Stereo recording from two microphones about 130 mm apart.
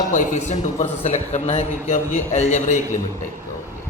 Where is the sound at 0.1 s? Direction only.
65° left (ahead or behind).